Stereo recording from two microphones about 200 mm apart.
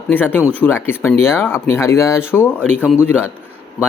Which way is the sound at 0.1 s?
10° left (ahead or behind).